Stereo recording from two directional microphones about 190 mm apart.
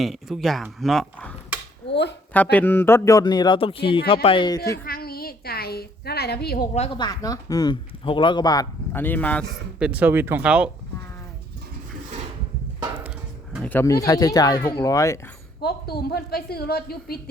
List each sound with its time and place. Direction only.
0.0 s speech: centre (ahead or behind)
1.9 s speech: 65° left (ahead or behind)
2.3 s speech: 10° left (ahead or behind)
4.9 s a woman's voice: 50° left (ahead or behind)
6.7 s speech: 30° left (ahead or behind); by 9.4 s 10° left (ahead or behind)
9.7 s speech: 5° right (ahead or behind)
13.7 s speech: 15° left (ahead or behind)
15.6 s a woman's voice: 55° left (ahead or behind)